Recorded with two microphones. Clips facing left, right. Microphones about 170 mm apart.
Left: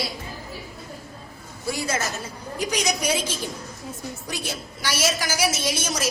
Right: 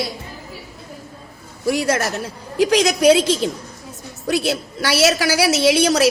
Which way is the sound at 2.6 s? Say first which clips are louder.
Right 11 dB; 90° right.